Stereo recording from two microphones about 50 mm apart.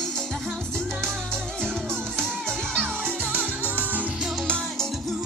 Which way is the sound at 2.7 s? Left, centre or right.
Right.